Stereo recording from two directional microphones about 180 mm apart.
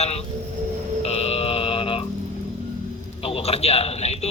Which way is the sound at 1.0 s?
35° left (ahead or behind).